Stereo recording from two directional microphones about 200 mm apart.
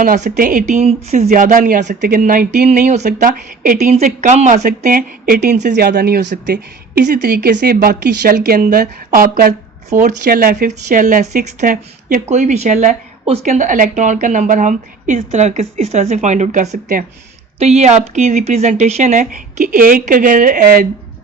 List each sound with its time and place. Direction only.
0.0 s speech: 40° right (ahead or behind)
2.6 s speech: 35° right (ahead or behind)
5.6 s speech: 50° right (ahead or behind)